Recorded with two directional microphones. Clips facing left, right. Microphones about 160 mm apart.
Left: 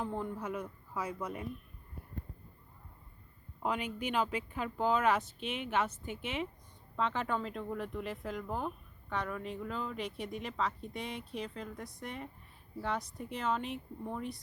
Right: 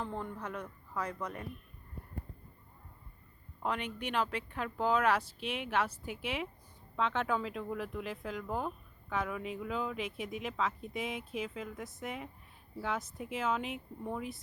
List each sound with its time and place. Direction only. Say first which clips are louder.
0.0 s speech: left 2 dB; 5° left (ahead or behind)
3.6 s speech: left 1 dB; 5° left (ahead or behind)